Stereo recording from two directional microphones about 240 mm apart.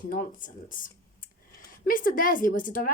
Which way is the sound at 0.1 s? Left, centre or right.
Left.